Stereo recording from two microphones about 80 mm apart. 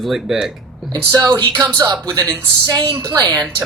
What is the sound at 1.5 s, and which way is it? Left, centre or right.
A woman's voice, right.